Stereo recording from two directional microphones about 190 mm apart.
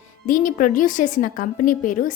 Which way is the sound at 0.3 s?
45° left (ahead or behind).